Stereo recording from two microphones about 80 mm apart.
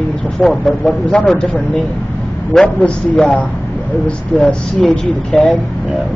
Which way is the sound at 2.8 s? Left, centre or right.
Centre.